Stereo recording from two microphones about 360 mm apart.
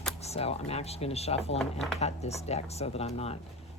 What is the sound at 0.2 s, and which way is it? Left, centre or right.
Speech, centre.